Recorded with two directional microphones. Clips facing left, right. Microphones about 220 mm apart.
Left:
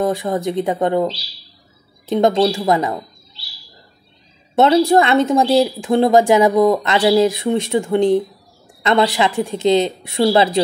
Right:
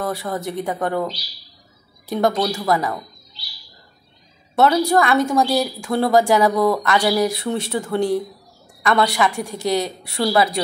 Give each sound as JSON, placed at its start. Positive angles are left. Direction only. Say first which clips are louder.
{"t": 0.0, "sound": "a woman's voice", "louder": "left 6 dB", "side_deg": 15}
{"t": 4.6, "sound": "a woman's voice", "louder": "left 4 dB", "side_deg": 25}